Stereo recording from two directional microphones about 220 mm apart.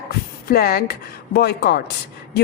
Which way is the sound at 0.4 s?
45° left (ahead or behind).